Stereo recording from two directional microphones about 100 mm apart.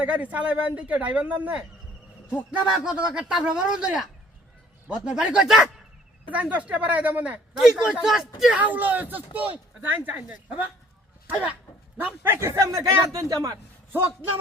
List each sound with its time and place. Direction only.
0.0 s speech: 15° right (ahead or behind)
6.2 s speech: 15° right (ahead or behind)
11.9 s a man's voice: 20° right (ahead or behind); by 13.6 s 35° right (ahead or behind)